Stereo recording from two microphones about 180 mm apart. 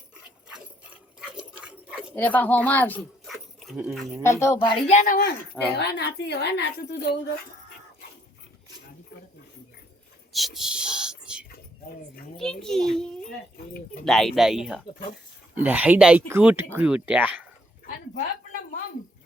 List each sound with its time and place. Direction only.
0.4 s dog: 5° right (ahead or behind)
2.1 s speech: 10° left (ahead or behind)
4.2 s speech: 15° left (ahead or behind)
4.6 s speech: 25° left (ahead or behind)
4.9 s speech: 50° left (ahead or behind)
5.7 s speech: 65° left (ahead or behind)
10.3 s whispering: centre (ahead or behind)
12.4 s a child's voice: 5° left (ahead or behind)